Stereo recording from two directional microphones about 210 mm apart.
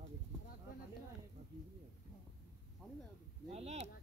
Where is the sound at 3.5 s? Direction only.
30° right (ahead or behind).